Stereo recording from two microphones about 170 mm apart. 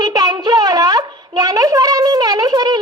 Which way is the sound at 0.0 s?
25° right (ahead or behind).